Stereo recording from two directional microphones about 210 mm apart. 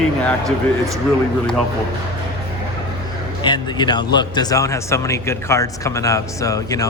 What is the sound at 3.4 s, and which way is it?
Speech, 20° left (ahead or behind).